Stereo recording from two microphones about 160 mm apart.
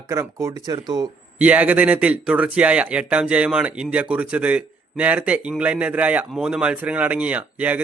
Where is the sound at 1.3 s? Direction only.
10° right (ahead or behind).